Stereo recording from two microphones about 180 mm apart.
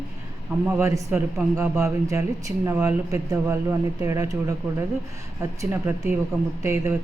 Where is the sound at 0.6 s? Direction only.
15° right (ahead or behind).